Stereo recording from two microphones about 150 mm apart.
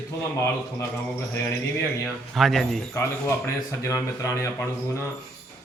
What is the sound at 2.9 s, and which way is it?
Speech, 20° left (ahead or behind).